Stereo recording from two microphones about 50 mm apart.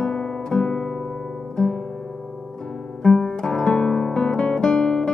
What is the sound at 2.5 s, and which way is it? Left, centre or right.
Music, centre.